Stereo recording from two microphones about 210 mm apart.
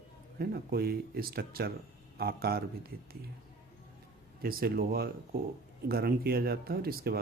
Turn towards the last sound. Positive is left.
turn(degrees=-45)  # may be behind; listen again after turning